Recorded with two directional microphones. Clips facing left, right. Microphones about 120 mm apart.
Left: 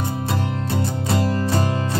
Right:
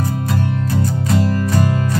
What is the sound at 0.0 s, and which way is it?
Music, 25° left (ahead or behind).